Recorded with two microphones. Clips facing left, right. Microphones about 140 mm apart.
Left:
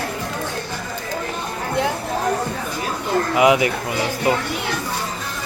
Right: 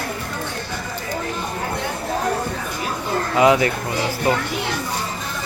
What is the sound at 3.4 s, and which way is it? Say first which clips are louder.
Speech: right 1 dB; 15° left (ahead or behind).